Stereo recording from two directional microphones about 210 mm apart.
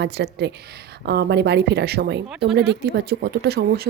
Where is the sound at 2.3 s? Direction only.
5° right (ahead or behind).